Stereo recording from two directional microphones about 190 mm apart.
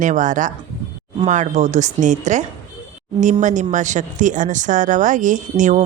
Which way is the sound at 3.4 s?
40° right (ahead or behind).